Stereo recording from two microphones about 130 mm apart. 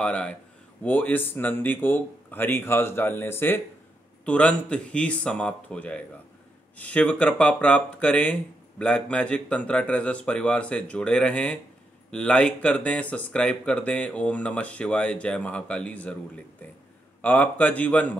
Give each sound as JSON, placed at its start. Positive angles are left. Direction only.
{"t": 0.0, "sound": "speech", "side_deg": 10}
{"t": 17.2, "sound": "speech", "side_deg": 10}